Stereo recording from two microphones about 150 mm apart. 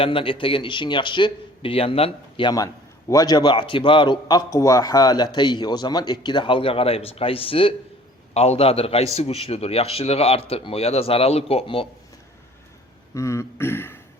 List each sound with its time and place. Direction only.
0.0 s a man's voice: 35° left (ahead or behind)
13.1 s throat clearing: 20° left (ahead or behind)